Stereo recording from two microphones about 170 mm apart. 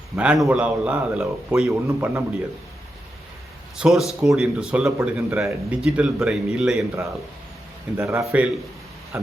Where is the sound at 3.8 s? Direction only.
Centre (ahead or behind).